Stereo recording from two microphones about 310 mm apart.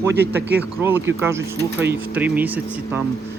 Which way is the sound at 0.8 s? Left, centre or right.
Centre.